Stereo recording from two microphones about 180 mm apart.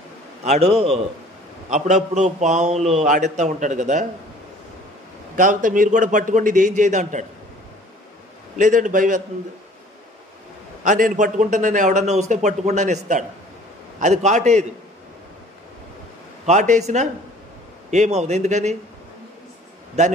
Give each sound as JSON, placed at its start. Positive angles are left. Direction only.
{"t": 0.4, "sound": "a man's voice", "side_deg": -35}
{"t": 5.3, "sound": "a man's voice", "side_deg": -45}
{"t": 8.5, "sound": "a man's voice", "side_deg": -45}
{"t": 10.8, "sound": "a man's voice", "side_deg": -45}
{"t": 16.4, "sound": "a man's voice", "side_deg": -40}
{"t": 20.0, "sound": "a man's voice", "side_deg": -40}